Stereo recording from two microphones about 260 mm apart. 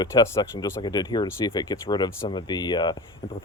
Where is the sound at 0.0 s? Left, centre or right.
Centre.